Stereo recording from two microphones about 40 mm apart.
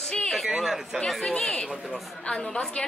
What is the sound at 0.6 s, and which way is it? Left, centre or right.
Speech, centre.